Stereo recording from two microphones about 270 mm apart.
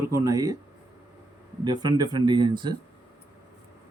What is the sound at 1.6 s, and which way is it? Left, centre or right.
A man's voice, centre.